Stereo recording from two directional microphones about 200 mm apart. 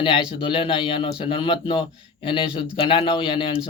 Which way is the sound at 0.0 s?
25° left (ahead or behind).